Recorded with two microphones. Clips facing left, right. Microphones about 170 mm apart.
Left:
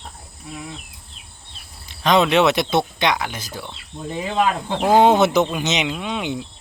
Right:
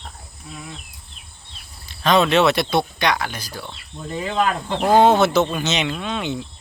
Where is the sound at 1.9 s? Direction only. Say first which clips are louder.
Even; 20° left (ahead or behind).